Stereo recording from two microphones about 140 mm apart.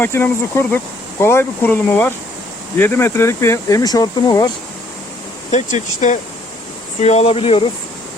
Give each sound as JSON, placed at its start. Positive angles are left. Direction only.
{"t": 0.0, "sound": "speech", "side_deg": 15}
{"t": 5.5, "sound": "speech", "side_deg": 55}